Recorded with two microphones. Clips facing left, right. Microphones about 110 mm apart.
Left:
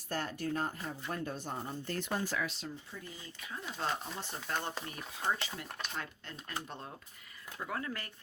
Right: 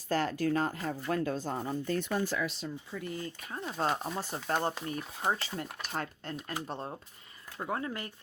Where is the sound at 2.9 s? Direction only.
75° right (ahead or behind).